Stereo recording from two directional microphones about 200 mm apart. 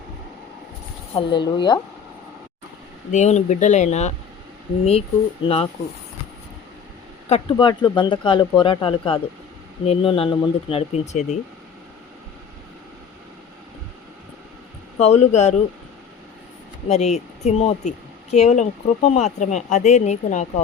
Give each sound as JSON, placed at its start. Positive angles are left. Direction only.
{"t": 1.1, "sound": "speech", "side_deg": 25}
{"t": 3.1, "sound": "speech", "side_deg": 35}
{"t": 7.3, "sound": "speech", "side_deg": 30}
{"t": 14.9, "sound": "speech", "side_deg": 35}
{"t": 16.9, "sound": "speech", "side_deg": 35}